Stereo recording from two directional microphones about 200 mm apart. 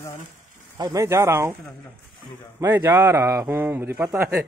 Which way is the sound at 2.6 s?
15° right (ahead or behind).